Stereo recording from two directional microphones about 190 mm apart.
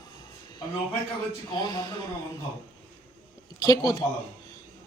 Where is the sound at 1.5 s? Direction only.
20° left (ahead or behind).